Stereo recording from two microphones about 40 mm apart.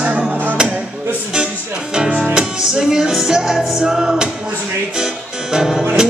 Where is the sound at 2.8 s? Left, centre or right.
Centre.